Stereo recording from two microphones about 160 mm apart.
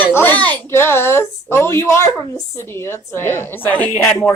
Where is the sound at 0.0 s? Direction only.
15° left (ahead or behind).